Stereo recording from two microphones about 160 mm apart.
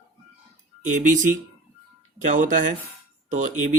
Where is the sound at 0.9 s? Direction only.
50° right (ahead or behind).